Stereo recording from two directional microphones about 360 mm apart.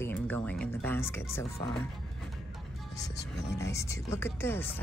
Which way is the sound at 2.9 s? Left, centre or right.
Centre.